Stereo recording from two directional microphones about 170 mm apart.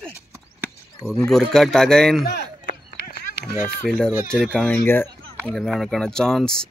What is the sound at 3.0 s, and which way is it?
Run, 70° left (ahead or behind).